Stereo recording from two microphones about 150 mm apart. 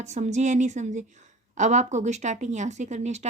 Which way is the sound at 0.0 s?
50° right (ahead or behind).